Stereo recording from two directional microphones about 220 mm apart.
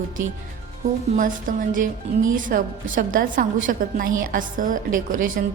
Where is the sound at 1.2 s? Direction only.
35° right (ahead or behind).